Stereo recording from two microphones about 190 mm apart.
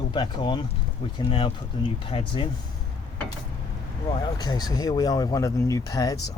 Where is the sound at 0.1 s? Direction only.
25° left (ahead or behind).